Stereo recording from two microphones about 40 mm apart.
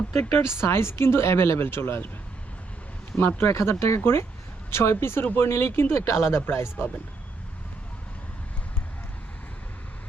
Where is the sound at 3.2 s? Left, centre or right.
Left.